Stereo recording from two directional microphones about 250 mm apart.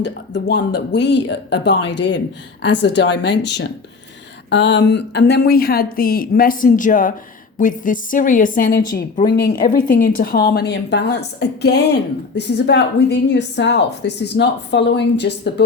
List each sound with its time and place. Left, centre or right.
0.0 s speech: left